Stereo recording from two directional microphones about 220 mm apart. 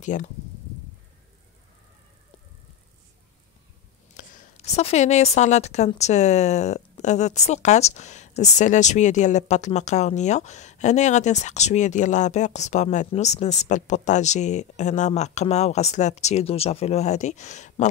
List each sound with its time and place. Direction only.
0.0 s speech: 35° left (ahead or behind)
4.1 s a woman's voice: 35° left (ahead or behind)